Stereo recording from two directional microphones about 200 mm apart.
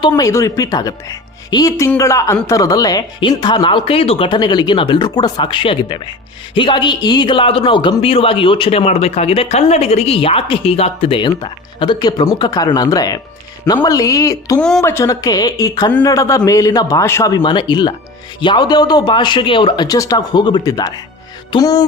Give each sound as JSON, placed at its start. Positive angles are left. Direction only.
{"t": 0.1, "sound": "a man's voice", "side_deg": 15}